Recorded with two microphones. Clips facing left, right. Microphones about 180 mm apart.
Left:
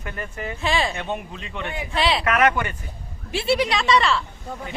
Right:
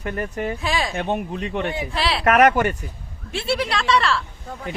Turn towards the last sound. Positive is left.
turn(degrees=0)  # may be behind; listen again after turning